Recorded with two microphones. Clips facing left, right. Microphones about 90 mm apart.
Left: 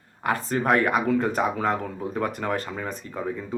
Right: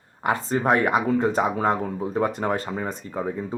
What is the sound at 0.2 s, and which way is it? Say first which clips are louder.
Speech: right 2 dB; 20° right (ahead or behind).